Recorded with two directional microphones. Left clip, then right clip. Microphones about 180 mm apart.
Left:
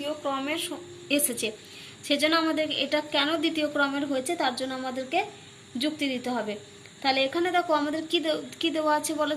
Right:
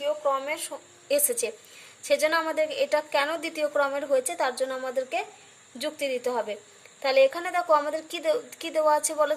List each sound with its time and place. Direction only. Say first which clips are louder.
0.0 s a woman's voice: right 4 dB; 20° right (ahead or behind); by 9.3 s 50° right (ahead or behind)